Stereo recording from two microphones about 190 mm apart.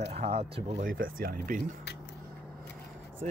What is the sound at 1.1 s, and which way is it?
Speech, 50° right (ahead or behind).